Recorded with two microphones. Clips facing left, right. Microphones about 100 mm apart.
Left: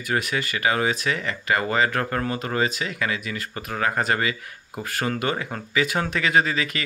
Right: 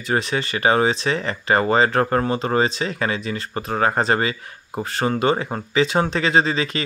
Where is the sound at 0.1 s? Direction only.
30° right (ahead or behind).